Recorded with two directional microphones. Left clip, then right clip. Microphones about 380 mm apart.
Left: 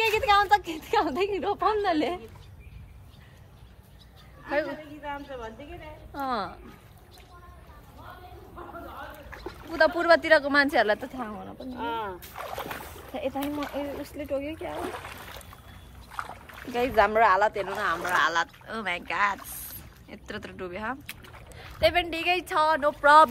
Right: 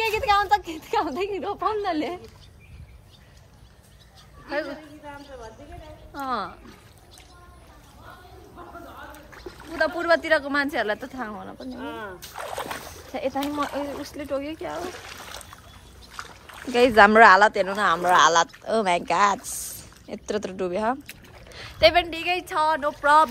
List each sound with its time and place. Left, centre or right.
0.0 s a woman's voice: centre
5.0 s a woman's voice: left
6.1 s a woman's voice: centre
9.7 s a woman's voice: centre
12.2 s speech: right
13.1 s speech: centre
13.5 s speech: right
14.0 s speech: centre
14.8 s speech: centre
16.1 s splash: centre
16.4 s speech: right
22.0 s a woman's voice: centre